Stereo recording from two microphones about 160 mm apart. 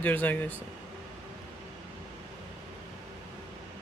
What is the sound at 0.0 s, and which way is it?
Speech, 10° left (ahead or behind).